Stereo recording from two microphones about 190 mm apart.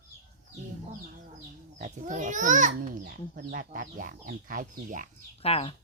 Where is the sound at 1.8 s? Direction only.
40° right (ahead or behind).